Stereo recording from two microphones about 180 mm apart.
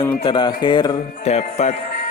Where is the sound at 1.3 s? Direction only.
40° left (ahead or behind).